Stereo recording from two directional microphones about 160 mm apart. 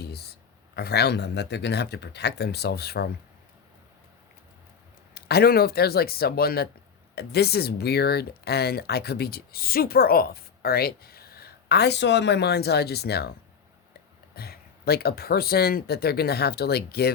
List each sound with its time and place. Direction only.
0.0 s a sound: 80° left
0.8 s speech: 90° left
5.1 s speech: 75° left (ahead or behind)
7.2 s speech: 90° left
14.3 s speech: 75° left (ahead or behind)